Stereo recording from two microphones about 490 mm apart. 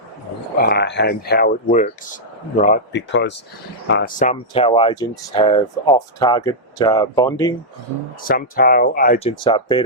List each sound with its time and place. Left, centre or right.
0.6 s speech: centre
8.3 s speech: centre